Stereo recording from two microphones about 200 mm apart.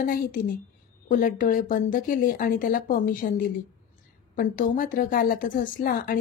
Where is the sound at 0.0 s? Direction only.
45° left (ahead or behind).